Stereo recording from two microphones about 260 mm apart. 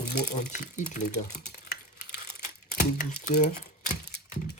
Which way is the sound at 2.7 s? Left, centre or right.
Left.